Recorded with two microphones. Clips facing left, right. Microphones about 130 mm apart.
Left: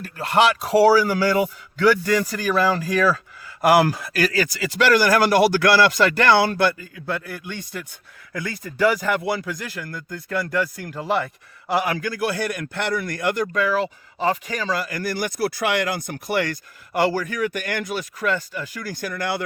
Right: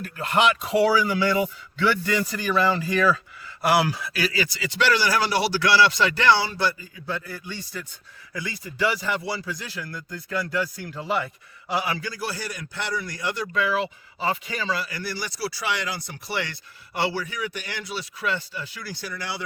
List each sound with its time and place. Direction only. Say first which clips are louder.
0.0 s a man's voice: left 3 dB; 35° left (ahead or behind); by 19.4 s 50° left (ahead or behind)